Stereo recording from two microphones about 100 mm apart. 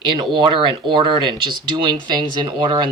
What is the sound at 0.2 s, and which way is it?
Speech, 50° right (ahead or behind).